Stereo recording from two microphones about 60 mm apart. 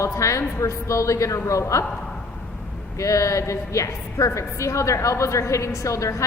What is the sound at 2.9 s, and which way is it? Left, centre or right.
A woman's voice, left.